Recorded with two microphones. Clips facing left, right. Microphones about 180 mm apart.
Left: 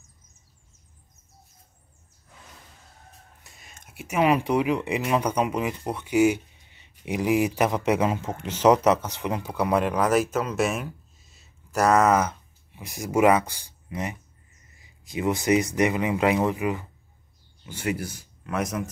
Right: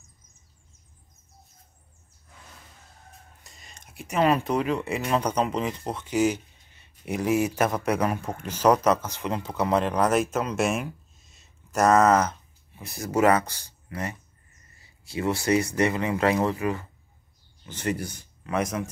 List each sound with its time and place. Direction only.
3.4 s speech: 5° left (ahead or behind)